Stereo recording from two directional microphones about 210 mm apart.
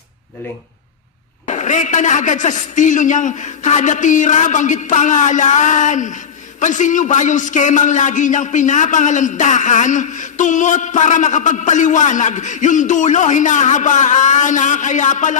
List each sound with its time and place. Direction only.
1.5 s a man's voice: 35° left (ahead or behind)